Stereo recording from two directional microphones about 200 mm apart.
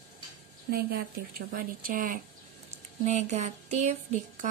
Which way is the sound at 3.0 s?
35° right (ahead or behind).